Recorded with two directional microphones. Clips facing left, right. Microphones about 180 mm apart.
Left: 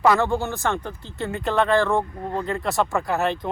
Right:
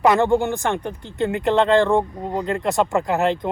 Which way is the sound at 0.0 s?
15° right (ahead or behind).